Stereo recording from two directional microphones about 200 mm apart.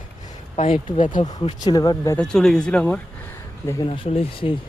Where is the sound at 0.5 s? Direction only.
30° left (ahead or behind).